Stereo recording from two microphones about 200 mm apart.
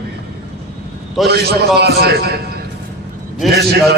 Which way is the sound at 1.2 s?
50° right (ahead or behind).